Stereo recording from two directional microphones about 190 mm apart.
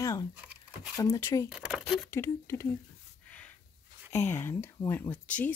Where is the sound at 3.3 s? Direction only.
10° left (ahead or behind).